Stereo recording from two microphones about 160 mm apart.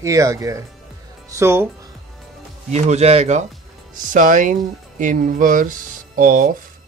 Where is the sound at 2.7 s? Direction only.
45° right (ahead or behind).